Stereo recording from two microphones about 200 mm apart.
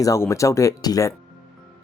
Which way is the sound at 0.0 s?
15° left (ahead or behind).